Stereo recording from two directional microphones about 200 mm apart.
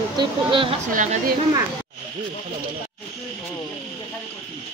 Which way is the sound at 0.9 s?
40° right (ahead or behind).